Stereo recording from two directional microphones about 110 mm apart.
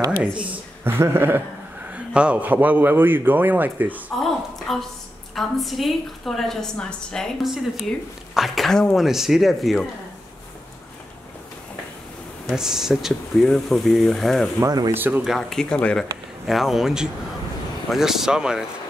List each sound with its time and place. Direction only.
0.5 s speech: 20° right (ahead or behind)
1.9 s a man's voice: 10° right (ahead or behind)
4.2 s a sound: centre (ahead or behind)
5.3 s a woman's voice: centre (ahead or behind)
12.5 s a woman's voice: 5° right (ahead or behind)
14.6 s speech: 35° right (ahead or behind)
14.9 s a man's voice: 15° right (ahead or behind)
15.2 s a woman's voice: 5° left (ahead or behind)
16.4 s a woman's voice: centre (ahead or behind)